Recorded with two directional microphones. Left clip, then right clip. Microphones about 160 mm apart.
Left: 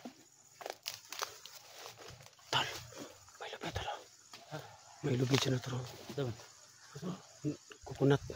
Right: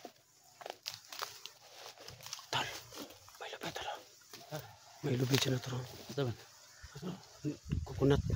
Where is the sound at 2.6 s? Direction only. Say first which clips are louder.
Left 3 dB; 15° left (ahead or behind).